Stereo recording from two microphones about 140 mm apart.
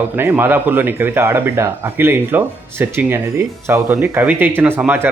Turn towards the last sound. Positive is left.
turn(degrees=-15)  # may be behind; listen again after turning